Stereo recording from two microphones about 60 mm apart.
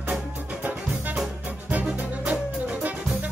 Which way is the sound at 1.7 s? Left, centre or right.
Right.